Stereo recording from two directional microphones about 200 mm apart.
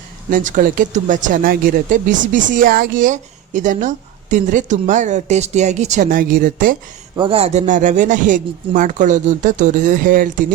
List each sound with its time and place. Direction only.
0.3 s speech: 40° right (ahead or behind)
7.2 s speech: 30° right (ahead or behind)